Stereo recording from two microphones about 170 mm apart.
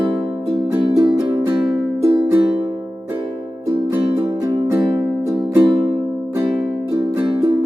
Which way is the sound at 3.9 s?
10° right (ahead or behind).